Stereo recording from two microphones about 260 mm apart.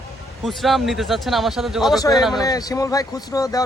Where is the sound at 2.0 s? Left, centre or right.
Centre.